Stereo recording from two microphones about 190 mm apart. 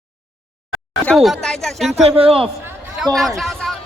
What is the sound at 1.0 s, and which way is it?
Speech, centre (ahead or behind).